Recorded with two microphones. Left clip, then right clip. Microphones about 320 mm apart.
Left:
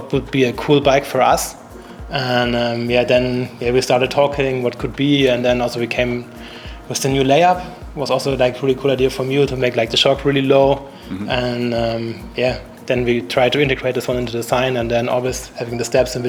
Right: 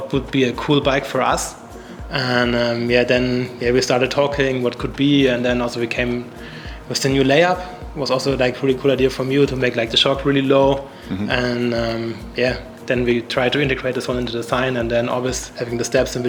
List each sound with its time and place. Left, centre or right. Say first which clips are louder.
0.1 s speech: left 3 dB; left